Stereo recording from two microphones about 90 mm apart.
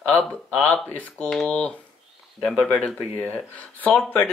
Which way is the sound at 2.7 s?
15° left (ahead or behind).